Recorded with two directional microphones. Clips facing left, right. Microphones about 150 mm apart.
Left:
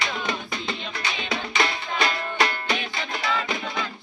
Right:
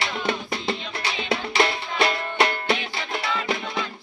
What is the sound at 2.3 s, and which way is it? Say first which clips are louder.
Music: right 3 dB; 25° right (ahead or behind).